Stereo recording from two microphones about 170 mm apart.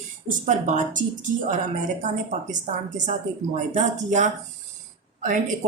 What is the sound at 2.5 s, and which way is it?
A woman's voice, 45° right (ahead or behind).